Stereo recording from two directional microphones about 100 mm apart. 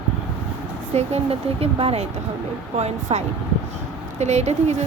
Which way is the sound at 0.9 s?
85° right.